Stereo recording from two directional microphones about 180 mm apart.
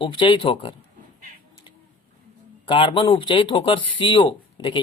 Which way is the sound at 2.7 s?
30° left (ahead or behind).